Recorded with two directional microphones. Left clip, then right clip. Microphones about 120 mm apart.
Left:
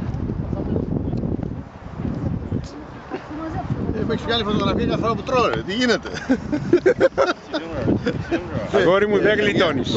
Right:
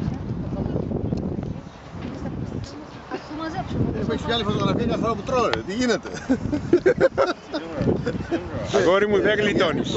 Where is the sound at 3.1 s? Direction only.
15° left (ahead or behind).